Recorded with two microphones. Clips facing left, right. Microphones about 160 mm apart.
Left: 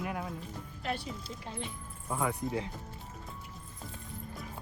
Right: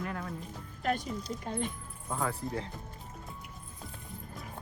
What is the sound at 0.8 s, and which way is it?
Speech, 45° right (ahead or behind).